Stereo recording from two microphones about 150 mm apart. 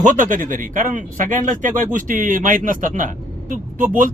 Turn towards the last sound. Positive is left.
turn(degrees=-60)  # may be behind; listen again after turning